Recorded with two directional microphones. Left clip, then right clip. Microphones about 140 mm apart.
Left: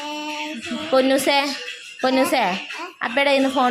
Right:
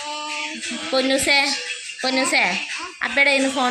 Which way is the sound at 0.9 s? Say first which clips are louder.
Left 1 dB; 40° left (ahead or behind).